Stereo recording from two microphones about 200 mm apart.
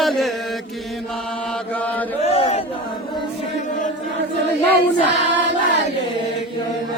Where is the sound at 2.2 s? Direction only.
30° left (ahead or behind).